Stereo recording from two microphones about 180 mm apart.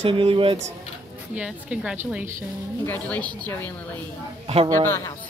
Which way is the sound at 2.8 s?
10° left (ahead or behind).